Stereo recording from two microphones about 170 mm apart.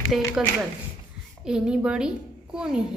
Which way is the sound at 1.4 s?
5° right (ahead or behind).